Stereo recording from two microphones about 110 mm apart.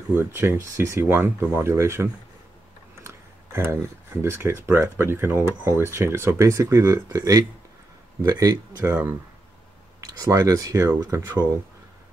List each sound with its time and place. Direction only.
0.2 s speech: 20° right (ahead or behind)